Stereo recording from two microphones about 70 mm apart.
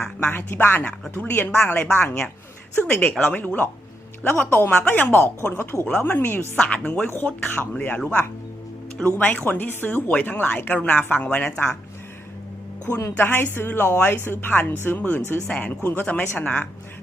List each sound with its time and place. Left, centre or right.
0.2 s speech: left
2.8 s a woman's voice: centre
13.1 s speech: left
15.4 s a woman's voice: centre
15.7 s speech: left